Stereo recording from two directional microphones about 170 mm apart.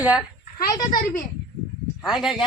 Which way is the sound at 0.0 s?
5° right (ahead or behind).